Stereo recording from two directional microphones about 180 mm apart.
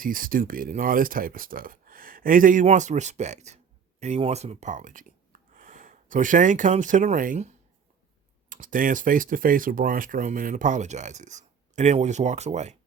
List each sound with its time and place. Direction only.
0.0 s speech: 50° right (ahead or behind)